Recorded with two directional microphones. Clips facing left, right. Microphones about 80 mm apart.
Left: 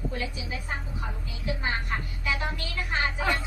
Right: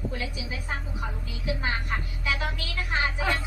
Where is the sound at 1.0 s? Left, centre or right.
Centre.